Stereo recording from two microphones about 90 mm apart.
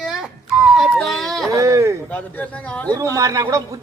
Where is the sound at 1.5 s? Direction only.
35° right (ahead or behind).